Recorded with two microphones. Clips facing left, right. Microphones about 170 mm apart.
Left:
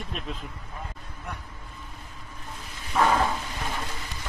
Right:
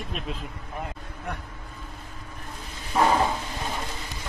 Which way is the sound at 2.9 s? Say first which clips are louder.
Right 1 dB; 20° right (ahead or behind).